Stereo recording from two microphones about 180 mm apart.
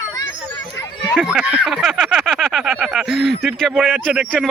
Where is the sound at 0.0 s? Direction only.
20° left (ahead or behind).